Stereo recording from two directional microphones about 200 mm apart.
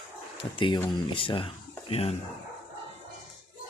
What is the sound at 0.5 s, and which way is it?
Speech, 20° left (ahead or behind).